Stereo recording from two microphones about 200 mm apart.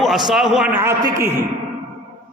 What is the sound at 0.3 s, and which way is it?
A man's voice, centre (ahead or behind).